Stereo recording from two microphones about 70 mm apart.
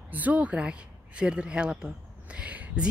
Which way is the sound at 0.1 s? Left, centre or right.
Right.